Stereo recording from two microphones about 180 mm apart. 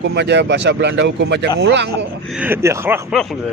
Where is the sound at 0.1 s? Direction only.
75° right (ahead or behind).